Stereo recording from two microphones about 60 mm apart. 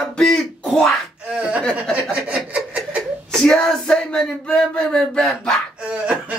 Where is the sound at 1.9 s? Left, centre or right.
Right.